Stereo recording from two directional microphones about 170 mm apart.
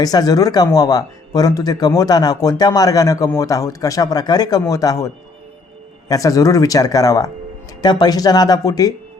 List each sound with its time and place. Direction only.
0.0 s speech: 20° left (ahead or behind)